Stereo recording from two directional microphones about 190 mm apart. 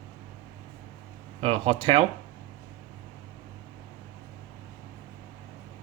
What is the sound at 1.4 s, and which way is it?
Speech, 30° right (ahead or behind).